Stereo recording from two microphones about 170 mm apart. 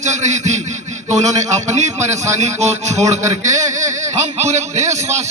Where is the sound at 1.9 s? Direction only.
45° right (ahead or behind).